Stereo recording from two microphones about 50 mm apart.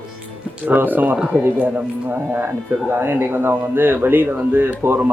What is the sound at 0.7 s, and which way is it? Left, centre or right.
Speech, right.